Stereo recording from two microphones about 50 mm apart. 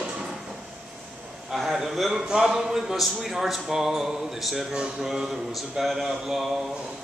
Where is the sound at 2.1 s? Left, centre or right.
Centre.